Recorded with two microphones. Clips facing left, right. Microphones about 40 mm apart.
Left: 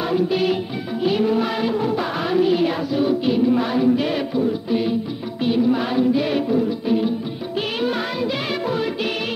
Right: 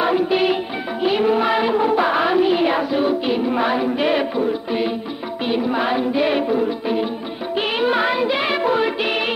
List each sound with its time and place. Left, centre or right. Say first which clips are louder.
0.0 s music: right 2 dB; right